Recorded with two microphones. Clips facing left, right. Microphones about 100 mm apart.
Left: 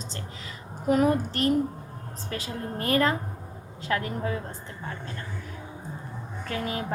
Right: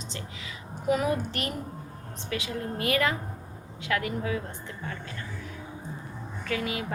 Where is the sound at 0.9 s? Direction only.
40° left (ahead or behind).